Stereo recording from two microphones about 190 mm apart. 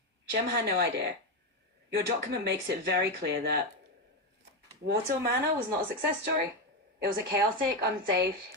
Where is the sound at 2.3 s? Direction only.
65° right (ahead or behind).